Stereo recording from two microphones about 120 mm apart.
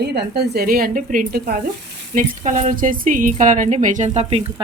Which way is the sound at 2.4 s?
90° right.